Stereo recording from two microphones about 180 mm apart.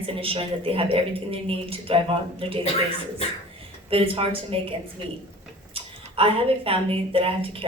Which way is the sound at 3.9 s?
30° right (ahead or behind).